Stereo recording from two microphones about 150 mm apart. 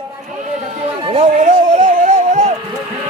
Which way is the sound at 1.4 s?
50° right (ahead or behind).